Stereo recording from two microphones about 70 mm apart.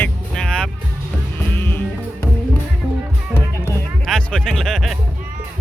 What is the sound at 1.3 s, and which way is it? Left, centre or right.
Music, left.